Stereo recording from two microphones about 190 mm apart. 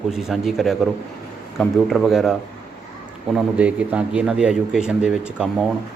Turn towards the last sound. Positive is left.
turn(degrees=-5)  # may be behind; listen again after turning